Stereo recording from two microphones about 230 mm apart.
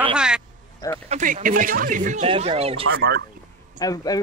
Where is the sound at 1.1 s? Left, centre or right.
Right.